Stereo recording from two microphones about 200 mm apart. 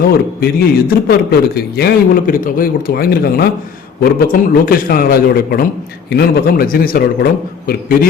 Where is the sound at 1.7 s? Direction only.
50° left (ahead or behind).